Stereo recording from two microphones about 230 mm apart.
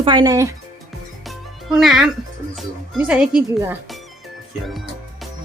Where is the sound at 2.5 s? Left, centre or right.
Centre.